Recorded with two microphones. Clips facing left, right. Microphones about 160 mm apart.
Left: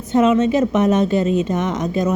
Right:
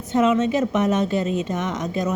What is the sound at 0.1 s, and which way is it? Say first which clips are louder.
Speech: left 4 dB; 25° left (ahead or behind).